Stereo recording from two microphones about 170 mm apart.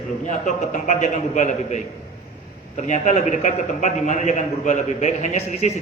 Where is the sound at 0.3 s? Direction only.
45° left (ahead or behind).